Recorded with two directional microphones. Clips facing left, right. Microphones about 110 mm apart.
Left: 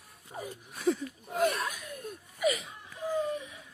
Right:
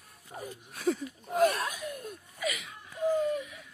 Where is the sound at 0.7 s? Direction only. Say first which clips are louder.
Left 1 dB; centre (ahead or behind).